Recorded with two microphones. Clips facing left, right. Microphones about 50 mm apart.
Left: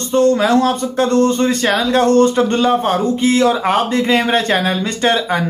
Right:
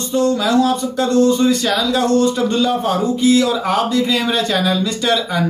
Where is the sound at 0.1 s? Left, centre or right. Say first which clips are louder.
Left 3 dB; left.